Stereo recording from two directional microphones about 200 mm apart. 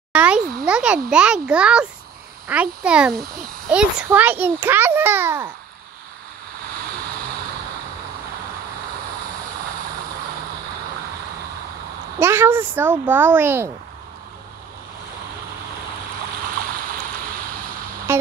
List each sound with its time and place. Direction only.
0.1 s a sound: 5° right (ahead or behind)
0.7 s a child's voice: 5° right (ahead or behind)
12.2 s a child's voice: 10° right (ahead or behind)
16.6 s stream: 45° right (ahead or behind)